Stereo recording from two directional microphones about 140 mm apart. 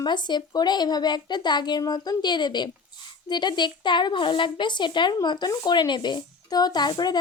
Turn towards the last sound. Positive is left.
turn(degrees=30)  # may be behind; listen again after turning